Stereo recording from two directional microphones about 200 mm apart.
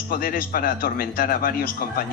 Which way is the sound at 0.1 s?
45° left (ahead or behind).